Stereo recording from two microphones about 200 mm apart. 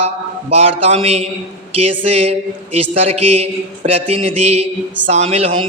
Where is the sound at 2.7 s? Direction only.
30° right (ahead or behind).